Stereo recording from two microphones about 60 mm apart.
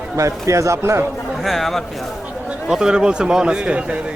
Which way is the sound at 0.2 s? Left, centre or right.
Right.